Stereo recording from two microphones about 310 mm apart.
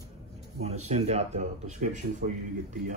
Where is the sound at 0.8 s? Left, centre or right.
Right.